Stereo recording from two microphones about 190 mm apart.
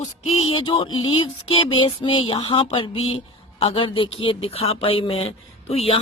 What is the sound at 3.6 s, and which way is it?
Speech, 30° left (ahead or behind).